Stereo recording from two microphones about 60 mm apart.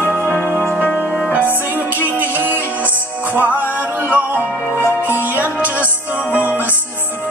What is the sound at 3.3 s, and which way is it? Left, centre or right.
Music, right.